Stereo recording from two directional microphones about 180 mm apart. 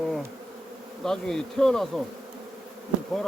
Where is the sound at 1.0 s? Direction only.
Centre (ahead or behind).